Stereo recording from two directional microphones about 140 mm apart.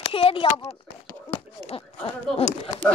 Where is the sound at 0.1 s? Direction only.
40° left (ahead or behind).